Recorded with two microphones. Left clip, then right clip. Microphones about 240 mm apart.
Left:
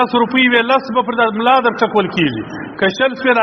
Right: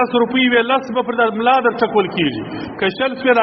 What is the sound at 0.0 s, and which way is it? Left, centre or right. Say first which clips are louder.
A man's voice: left 2 dB; left.